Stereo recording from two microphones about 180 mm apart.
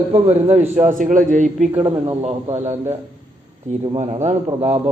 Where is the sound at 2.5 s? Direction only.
40° right (ahead or behind).